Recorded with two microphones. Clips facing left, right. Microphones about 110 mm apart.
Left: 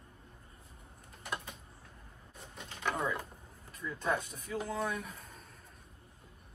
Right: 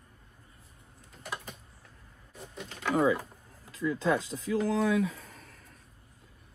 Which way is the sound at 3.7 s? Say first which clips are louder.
Right 7 dB; 90° right.